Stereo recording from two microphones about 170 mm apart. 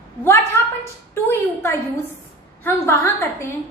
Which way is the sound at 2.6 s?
15° left (ahead or behind).